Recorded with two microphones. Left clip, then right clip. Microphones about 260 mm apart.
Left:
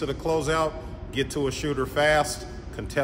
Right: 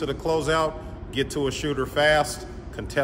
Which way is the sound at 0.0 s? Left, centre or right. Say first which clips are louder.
Right 1 dB; centre.